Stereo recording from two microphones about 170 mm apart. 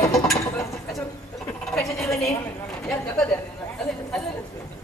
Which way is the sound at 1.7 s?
5° left (ahead or behind).